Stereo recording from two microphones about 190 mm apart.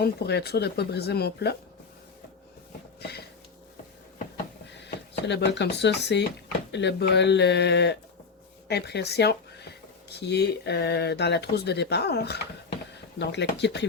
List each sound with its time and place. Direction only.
0.0 s speech: 60° left (ahead or behind)
3.0 s a sound: 60° left (ahead or behind)
4.6 s speech: 65° left (ahead or behind)